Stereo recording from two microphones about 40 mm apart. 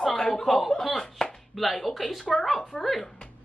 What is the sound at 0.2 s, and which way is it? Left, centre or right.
Chuckle, centre.